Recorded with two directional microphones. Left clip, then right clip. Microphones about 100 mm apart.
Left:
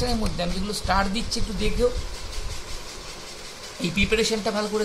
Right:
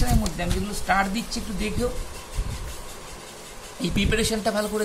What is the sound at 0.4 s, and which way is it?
Speech, 65° left (ahead or behind).